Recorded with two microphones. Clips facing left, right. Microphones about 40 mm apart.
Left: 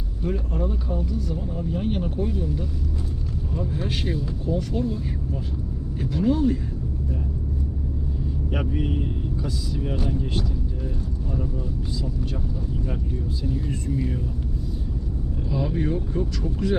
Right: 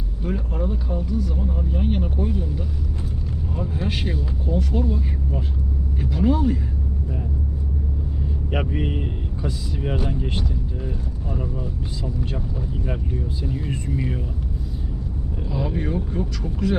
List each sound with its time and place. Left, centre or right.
0.2 s speech: centre
3.8 s speech: centre
6.0 s speech: centre
8.4 s speech: right
13.4 s speech: right
15.4 s speech: centre